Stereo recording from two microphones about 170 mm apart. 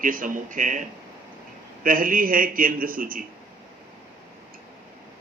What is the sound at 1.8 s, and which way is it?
A man's voice, 55° right (ahead or behind).